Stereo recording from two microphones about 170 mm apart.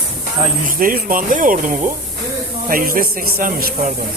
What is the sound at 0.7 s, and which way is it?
A man's voice, 55° right (ahead or behind).